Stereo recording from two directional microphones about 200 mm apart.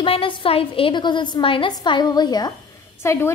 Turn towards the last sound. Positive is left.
turn(degrees=15)  # may be behind; listen again after turning